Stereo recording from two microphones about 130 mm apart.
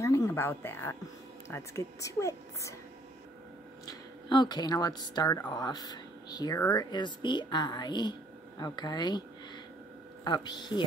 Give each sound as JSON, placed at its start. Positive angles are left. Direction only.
{"t": 0.0, "sound": "a sound", "side_deg": 25}
{"t": 1.5, "sound": "a woman's voice", "side_deg": 25}
{"t": 3.8, "sound": "speech", "side_deg": 35}
{"t": 10.2, "sound": "speech", "side_deg": 35}